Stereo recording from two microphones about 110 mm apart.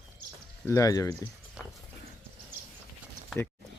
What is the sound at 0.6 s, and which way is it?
Speech, 30° left (ahead or behind).